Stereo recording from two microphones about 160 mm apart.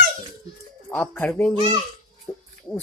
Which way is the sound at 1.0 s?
10° left (ahead or behind).